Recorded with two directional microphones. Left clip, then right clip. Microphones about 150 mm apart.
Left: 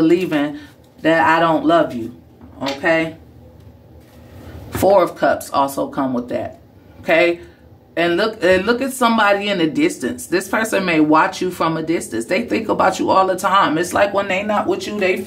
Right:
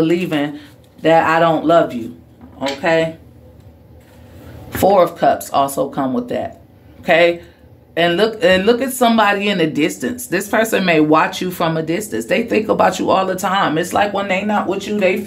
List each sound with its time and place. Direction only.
0.0 s speech: 10° right (ahead or behind)
4.6 s speech: 10° right (ahead or behind)